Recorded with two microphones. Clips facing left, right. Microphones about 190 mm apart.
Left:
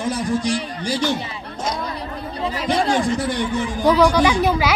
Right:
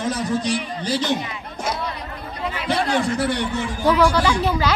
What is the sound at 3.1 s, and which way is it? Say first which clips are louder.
Speech: even; 65° right (ahead or behind).